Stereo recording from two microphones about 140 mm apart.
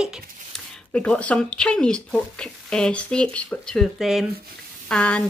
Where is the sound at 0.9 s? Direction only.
10° left (ahead or behind).